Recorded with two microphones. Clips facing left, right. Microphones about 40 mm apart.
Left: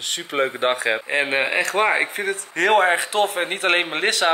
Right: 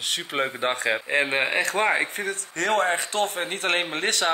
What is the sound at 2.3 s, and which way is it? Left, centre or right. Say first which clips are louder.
Speech: left 9 dB; centre.